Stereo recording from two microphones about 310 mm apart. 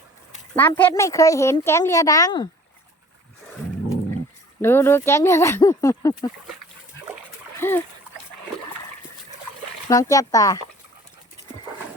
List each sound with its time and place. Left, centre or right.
0.5 s a woman's voice: centre
4.6 s a woman's voice: centre
7.6 s a woman's voice: centre
9.9 s a woman's voice: centre